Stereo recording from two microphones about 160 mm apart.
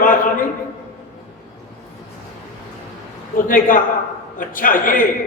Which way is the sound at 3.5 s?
60° left (ahead or behind).